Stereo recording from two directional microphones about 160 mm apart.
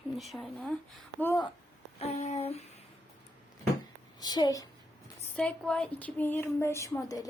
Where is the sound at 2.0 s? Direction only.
40° left (ahead or behind).